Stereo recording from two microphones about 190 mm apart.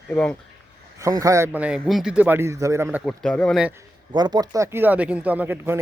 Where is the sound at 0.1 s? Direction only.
5° left (ahead or behind).